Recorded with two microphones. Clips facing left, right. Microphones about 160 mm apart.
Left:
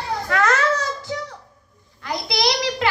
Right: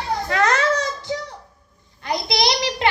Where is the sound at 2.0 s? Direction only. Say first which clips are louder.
Right 1 dB; 20° right (ahead or behind).